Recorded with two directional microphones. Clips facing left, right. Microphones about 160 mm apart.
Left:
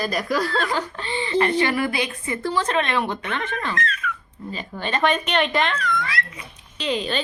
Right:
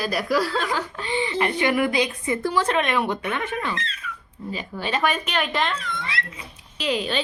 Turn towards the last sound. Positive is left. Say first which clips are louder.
# even
turn(degrees=-5)  # may be behind; listen again after turning